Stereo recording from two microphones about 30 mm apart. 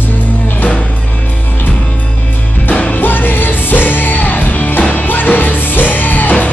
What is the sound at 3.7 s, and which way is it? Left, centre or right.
Music, left.